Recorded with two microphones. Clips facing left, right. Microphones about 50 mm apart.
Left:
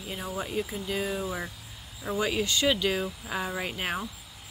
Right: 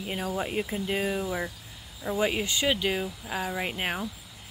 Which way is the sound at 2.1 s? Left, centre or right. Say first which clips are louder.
Even; right.